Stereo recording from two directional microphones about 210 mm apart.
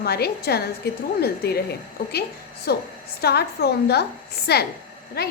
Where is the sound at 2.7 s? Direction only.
50° left (ahead or behind).